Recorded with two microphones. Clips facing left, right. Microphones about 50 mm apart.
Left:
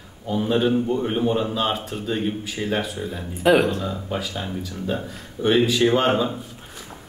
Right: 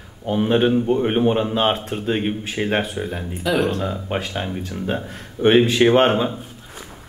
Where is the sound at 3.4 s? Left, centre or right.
Left.